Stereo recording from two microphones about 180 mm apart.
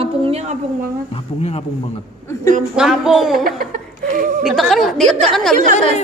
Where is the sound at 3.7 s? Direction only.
45° right (ahead or behind).